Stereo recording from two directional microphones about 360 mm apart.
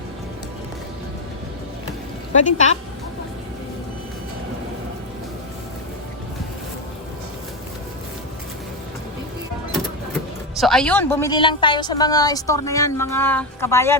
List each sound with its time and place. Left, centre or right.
2.4 s speech: centre
10.6 s a woman's voice: centre